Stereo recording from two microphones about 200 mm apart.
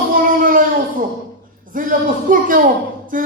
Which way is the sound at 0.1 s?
45° right (ahead or behind).